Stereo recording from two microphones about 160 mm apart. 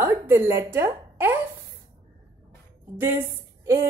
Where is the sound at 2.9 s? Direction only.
15° right (ahead or behind).